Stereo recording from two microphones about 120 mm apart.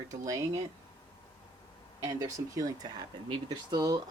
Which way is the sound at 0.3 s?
25° right (ahead or behind).